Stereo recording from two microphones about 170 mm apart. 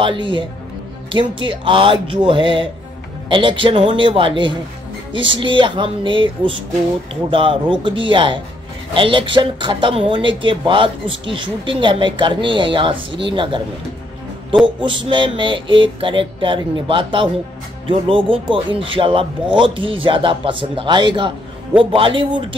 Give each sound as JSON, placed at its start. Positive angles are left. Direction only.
{"t": 0.0, "sound": "a woman's voice", "side_deg": -30}
{"t": 14.8, "sound": "speech", "side_deg": -30}